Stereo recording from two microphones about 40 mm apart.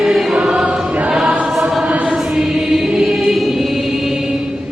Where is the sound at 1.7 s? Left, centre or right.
Centre.